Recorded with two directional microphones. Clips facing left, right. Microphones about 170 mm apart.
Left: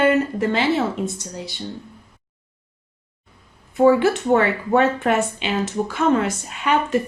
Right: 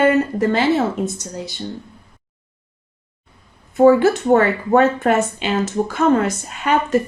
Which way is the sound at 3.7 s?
45° right (ahead or behind).